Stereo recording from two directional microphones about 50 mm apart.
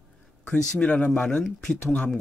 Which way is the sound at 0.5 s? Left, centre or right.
Left.